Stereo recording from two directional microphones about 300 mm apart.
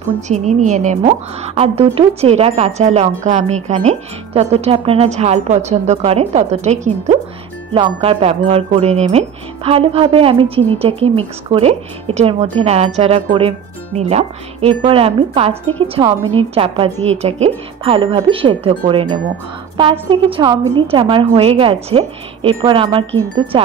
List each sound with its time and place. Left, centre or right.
0.3 s a woman's voice: right